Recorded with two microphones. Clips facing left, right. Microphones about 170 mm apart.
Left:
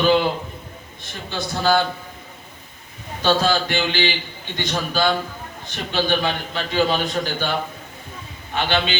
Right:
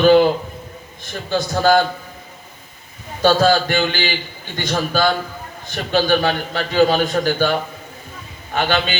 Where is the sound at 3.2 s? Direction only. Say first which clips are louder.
Right 5 dB; 45° right (ahead or behind).